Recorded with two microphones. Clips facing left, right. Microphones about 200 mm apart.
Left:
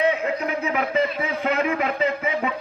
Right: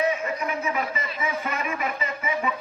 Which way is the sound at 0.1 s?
65° left (ahead or behind).